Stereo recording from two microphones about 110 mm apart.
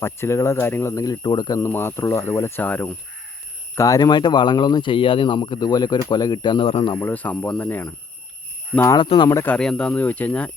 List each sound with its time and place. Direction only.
0.0 s speech: 25° left (ahead or behind)
1.2 s speech: 40° left (ahead or behind)
1.5 s speech: 20° left (ahead or behind)
3.8 s speech: 30° left (ahead or behind); by 6.9 s 55° left (ahead or behind)
7.0 s speech: 15° left (ahead or behind)
9.0 s speech: 45° left (ahead or behind)
9.5 s speech: 10° left (ahead or behind)